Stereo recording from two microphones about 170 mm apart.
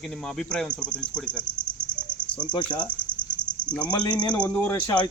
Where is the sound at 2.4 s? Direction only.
30° left (ahead or behind).